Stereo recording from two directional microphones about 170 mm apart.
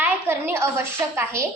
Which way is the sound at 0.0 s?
15° right (ahead or behind).